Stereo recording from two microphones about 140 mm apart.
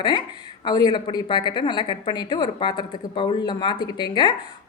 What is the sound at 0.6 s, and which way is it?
A woman's voice, 30° left (ahead or behind).